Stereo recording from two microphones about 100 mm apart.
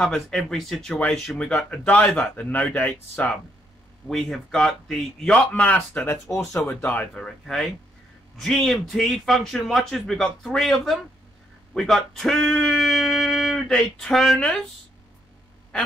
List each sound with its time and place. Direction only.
0.0 s a man's voice: 5° left (ahead or behind)
6.0 s speech: 30° left (ahead or behind)
6.7 s a man's voice: 15° left (ahead or behind)
7.2 s a man's voice: 5° left (ahead or behind)